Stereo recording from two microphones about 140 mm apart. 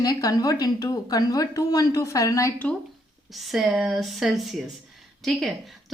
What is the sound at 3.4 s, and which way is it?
Speech, centre (ahead or behind).